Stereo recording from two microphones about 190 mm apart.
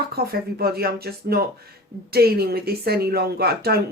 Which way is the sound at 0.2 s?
55° right (ahead or behind).